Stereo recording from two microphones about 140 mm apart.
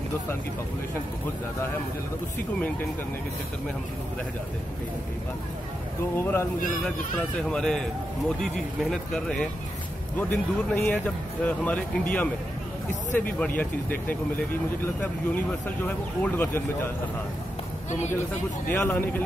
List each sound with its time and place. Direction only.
6.1 s speech: 15° left (ahead or behind)
7.4 s speech: 5° left (ahead or behind)
18.7 s speech: 15° left (ahead or behind)